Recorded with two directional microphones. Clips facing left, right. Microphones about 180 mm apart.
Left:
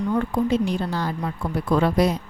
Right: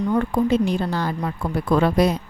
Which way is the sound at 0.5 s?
60° right (ahead or behind).